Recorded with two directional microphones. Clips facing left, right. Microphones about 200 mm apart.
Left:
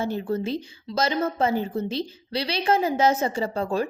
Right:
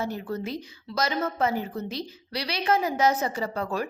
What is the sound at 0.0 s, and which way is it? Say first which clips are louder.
A woman's voice: left 4 dB; 30° left (ahead or behind).